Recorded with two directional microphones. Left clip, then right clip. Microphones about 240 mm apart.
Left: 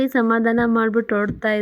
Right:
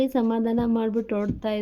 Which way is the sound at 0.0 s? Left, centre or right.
Centre.